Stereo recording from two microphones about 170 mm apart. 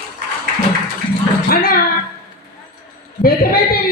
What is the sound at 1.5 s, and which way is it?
Speech, 60° left (ahead or behind).